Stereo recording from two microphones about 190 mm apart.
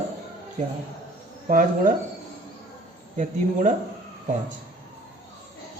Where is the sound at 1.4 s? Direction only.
45° right (ahead or behind).